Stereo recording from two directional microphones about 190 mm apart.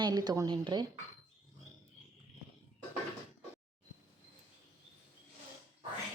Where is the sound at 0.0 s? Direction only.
20° right (ahead or behind).